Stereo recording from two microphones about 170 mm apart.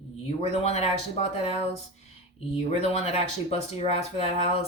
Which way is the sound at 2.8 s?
40° left (ahead or behind).